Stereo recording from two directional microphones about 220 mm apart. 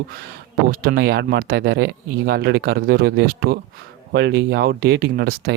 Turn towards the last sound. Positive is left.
turn(degrees=-45)  # may be behind; listen again after turning